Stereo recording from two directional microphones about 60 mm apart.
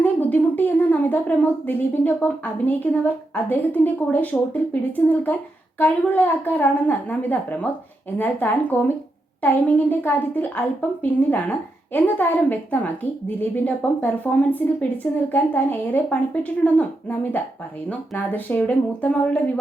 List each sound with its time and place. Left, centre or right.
0.0 s a woman's voice: left
18.2 s a woman's voice: left